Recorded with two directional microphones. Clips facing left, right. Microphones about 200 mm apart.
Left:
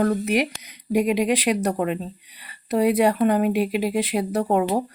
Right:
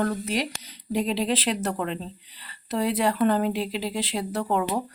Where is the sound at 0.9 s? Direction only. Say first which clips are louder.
Left 5 dB; 15° left (ahead or behind).